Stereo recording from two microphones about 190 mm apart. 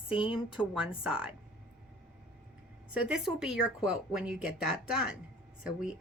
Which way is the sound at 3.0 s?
5° right (ahead or behind).